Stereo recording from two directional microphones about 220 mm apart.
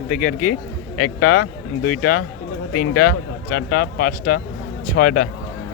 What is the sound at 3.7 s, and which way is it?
Speech, 45° left (ahead or behind).